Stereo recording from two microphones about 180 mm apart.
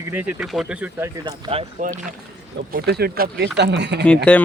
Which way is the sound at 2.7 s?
60° right (ahead or behind).